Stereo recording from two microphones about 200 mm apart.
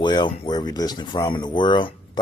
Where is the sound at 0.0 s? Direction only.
20° left (ahead or behind).